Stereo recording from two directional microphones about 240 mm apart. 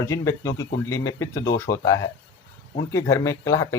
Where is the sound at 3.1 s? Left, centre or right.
Centre.